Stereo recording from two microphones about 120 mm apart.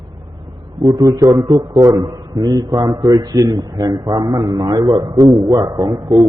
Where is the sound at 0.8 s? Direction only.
30° right (ahead or behind).